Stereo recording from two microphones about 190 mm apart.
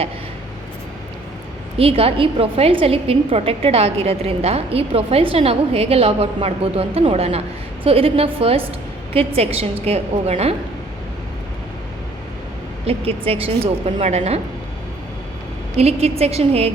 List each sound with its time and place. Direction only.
1.8 s a woman's voice: 30° right (ahead or behind)
12.8 s a woman's voice: 30° right (ahead or behind)
15.8 s a woman's voice: 35° right (ahead or behind)